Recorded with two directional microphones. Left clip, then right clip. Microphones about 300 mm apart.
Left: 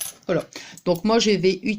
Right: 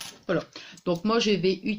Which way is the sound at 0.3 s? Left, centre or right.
Left.